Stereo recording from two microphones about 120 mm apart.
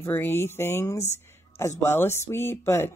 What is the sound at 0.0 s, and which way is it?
A woman's voice, 20° left (ahead or behind).